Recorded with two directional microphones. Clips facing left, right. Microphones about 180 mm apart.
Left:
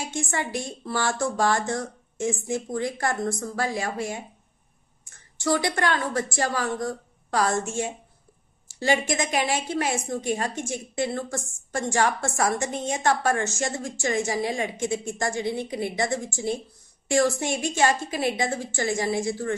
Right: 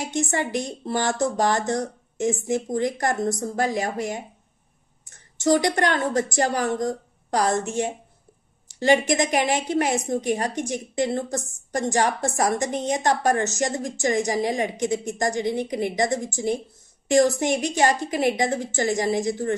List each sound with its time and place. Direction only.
0.0 s speech: 20° right (ahead or behind)
5.4 s a woman's voice: 20° right (ahead or behind)
9.0 s a woman's voice: 40° right (ahead or behind)
9.4 s a woman's voice: 20° right (ahead or behind)
12.9 s a woman's voice: 45° right (ahead or behind)
13.2 s a woman's voice: 20° right (ahead or behind)